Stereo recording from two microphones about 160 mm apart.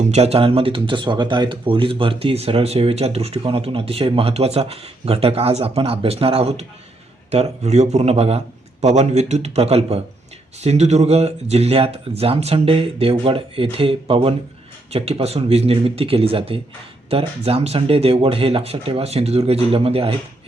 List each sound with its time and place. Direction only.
0.0 s a man's voice: 40° right (ahead or behind)